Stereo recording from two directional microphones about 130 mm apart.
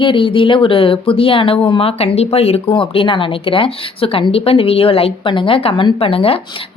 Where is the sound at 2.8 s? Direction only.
40° left (ahead or behind).